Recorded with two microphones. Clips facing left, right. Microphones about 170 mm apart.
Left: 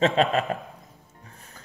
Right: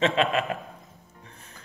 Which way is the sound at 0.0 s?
40° left (ahead or behind).